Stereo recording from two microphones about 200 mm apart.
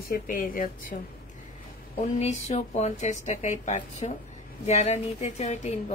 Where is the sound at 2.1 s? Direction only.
35° left (ahead or behind).